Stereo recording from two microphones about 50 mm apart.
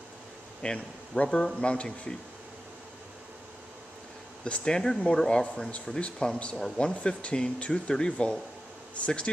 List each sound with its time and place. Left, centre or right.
0.6 s speech: centre
4.5 s speech: centre